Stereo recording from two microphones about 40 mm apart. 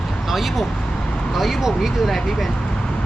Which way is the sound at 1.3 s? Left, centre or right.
Centre.